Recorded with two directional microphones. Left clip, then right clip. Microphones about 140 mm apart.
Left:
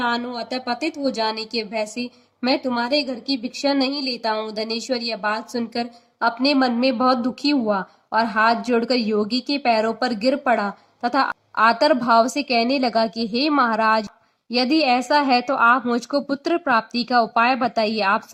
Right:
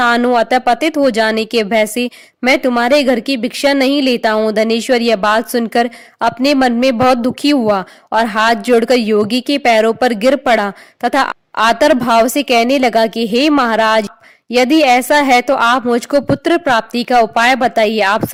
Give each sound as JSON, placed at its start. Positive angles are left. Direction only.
{"t": 0.3, "sound": "a woman's voice", "side_deg": -50}